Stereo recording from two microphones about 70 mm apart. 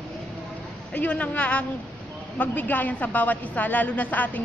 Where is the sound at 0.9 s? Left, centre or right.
Left.